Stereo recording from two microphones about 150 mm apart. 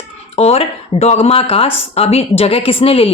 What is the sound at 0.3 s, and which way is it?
Speech, 40° left (ahead or behind).